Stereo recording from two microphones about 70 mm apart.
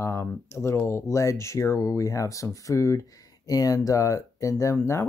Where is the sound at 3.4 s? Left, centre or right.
Left.